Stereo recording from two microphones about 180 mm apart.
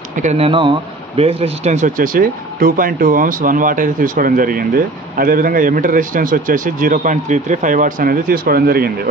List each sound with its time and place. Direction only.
0.1 s speech: 40° right (ahead or behind)